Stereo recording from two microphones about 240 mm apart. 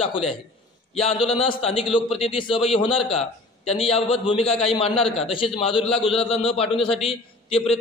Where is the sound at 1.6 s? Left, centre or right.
Left.